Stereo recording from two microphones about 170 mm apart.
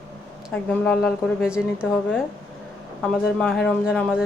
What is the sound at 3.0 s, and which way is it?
Speech, 5° left (ahead or behind).